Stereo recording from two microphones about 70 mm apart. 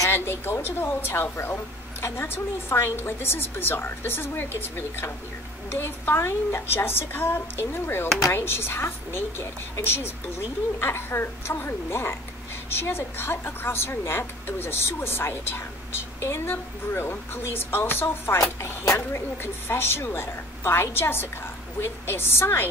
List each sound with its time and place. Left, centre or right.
0.1 s a woman's voice: left